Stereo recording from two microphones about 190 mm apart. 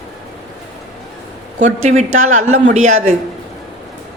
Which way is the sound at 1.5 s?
40° right (ahead or behind).